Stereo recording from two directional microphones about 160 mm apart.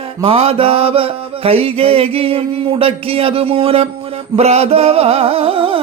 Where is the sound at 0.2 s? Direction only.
35° right (ahead or behind).